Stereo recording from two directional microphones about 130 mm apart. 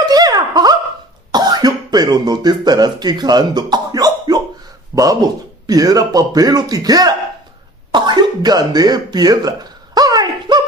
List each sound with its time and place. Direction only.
0.0 s a sound: 30° right (ahead or behind)
1.3 s cough: 30° right (ahead or behind)
4.9 s speech: 20° right (ahead or behind)
7.9 s throat clearing: 35° right (ahead or behind)